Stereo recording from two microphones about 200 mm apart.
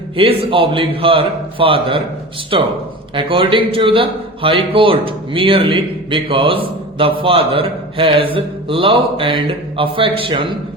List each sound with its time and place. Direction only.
0.2 s a man's voice: 30° right (ahead or behind)